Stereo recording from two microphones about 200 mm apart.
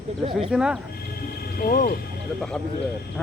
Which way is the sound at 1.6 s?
45° left (ahead or behind).